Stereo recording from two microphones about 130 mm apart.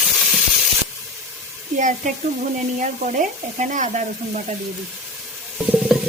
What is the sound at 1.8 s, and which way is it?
Frying, 80° right.